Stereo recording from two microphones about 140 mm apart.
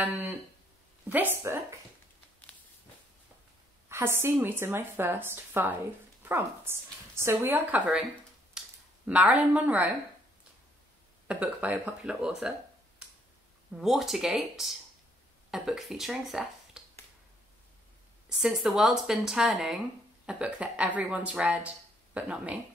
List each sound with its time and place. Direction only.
0.0 s a sound: 15° right (ahead or behind)
1.0 s a woman's voice: 10° right (ahead or behind)
3.9 s a woman's voice: 15° right (ahead or behind)
11.2 s a woman's voice: 10° right (ahead or behind)
13.7 s speech: centre (ahead or behind)
18.3 s a woman's voice: 5° right (ahead or behind)